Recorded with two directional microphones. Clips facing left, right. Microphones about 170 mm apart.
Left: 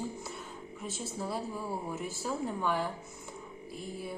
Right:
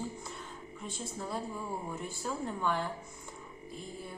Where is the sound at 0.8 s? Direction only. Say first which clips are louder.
Left 3 dB; 5° left (ahead or behind).